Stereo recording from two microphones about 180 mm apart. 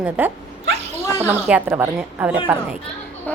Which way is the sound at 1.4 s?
10° right (ahead or behind).